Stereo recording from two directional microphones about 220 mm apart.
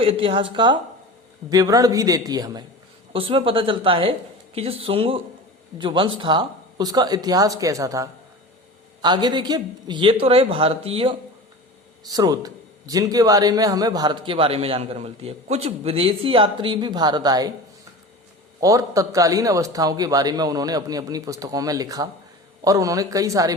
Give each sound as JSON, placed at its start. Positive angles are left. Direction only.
{"t": 0.0, "sound": "a man's voice", "side_deg": -25}
{"t": 12.1, "sound": "a man's voice", "side_deg": -15}
{"t": 18.6, "sound": "a man's voice", "side_deg": -15}